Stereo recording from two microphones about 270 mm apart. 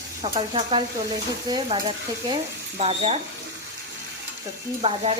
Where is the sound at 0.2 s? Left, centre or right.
Centre.